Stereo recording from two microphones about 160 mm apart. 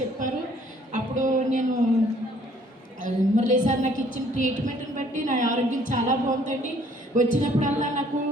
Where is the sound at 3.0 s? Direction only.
50° right (ahead or behind).